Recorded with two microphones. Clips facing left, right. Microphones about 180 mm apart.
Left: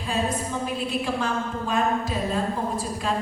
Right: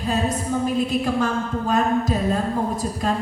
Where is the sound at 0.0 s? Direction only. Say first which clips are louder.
Right 3 dB; 40° right (ahead or behind).